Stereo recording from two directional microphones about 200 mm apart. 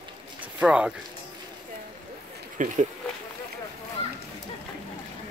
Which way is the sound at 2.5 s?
40° right (ahead or behind).